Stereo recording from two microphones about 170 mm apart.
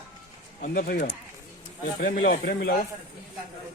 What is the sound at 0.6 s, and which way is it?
Speech, 55° left (ahead or behind).